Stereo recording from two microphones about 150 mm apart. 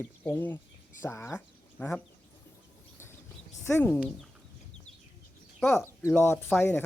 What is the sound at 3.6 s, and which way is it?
Speech, 15° left (ahead or behind).